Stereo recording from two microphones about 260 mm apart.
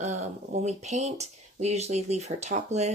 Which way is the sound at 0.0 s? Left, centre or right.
Right.